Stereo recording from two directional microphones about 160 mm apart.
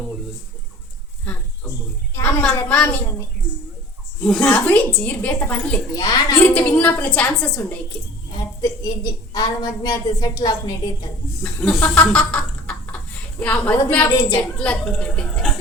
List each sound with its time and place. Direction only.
2.1 s speech: 10° left (ahead or behind)
4.3 s speech: 10° left (ahead or behind)
5.9 s a woman's voice: 25° left (ahead or behind)
6.4 s speech: 10° left (ahead or behind)
8.3 s a sound: 25° left (ahead or behind)
9.3 s a woman's voice: 25° left (ahead or behind)
11.4 s speech: 10° left (ahead or behind)
14.1 s a woman's voice: 25° left (ahead or behind)
14.6 s speech: 5° left (ahead or behind)